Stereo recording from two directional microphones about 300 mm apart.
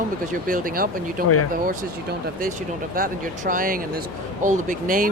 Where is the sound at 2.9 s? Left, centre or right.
Right.